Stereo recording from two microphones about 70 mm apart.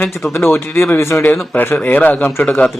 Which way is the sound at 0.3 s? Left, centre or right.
Left.